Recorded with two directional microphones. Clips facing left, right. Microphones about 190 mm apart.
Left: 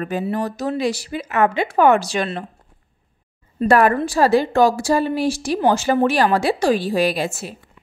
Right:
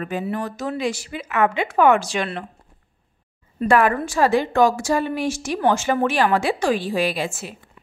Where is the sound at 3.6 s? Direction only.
40° left (ahead or behind).